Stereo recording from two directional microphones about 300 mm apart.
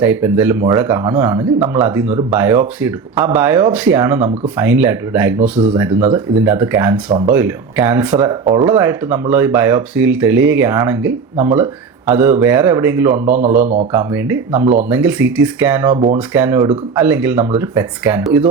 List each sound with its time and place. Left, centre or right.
0.0 s speech: centre
13.6 s speech: right
13.9 s speech: centre